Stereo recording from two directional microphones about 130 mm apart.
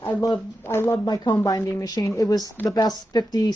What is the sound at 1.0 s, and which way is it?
A woman's voice, 30° left (ahead or behind).